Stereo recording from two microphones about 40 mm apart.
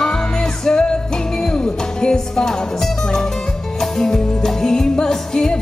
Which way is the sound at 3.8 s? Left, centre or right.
Centre.